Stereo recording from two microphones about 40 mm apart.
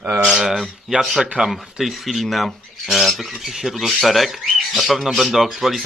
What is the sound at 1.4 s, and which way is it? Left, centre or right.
Squawk, centre.